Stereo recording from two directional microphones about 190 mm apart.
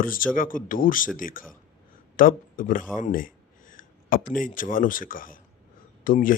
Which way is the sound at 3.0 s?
45° left (ahead or behind).